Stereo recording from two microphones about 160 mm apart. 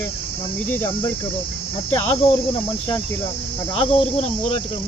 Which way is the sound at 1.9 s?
40° left (ahead or behind).